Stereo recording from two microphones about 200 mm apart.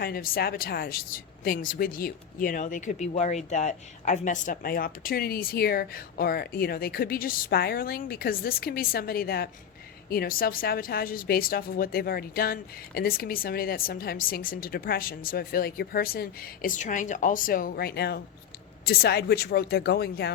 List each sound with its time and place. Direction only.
0.0 s speech: 50° left (ahead or behind)